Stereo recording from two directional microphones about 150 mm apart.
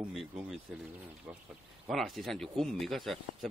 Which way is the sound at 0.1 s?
Centre (ahead or behind).